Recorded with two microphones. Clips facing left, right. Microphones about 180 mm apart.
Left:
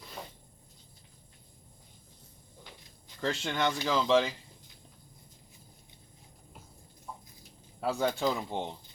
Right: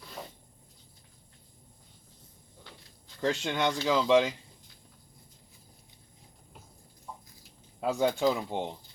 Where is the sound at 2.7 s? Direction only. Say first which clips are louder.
Right 1 dB; 15° left (ahead or behind).